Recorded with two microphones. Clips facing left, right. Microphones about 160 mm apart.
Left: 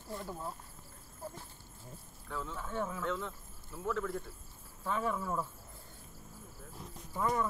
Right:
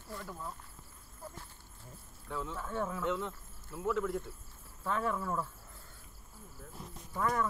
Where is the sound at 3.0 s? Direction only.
15° right (ahead or behind).